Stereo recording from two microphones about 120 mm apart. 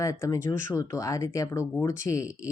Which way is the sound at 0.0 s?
25° left (ahead or behind).